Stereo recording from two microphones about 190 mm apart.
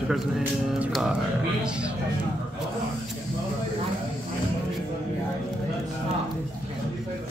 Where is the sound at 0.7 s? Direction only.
5° right (ahead or behind).